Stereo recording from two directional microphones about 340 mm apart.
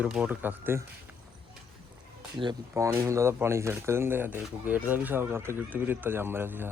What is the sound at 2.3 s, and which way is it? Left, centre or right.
Speech, centre.